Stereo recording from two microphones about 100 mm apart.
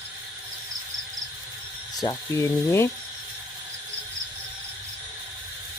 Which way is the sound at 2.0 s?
35° left (ahead or behind).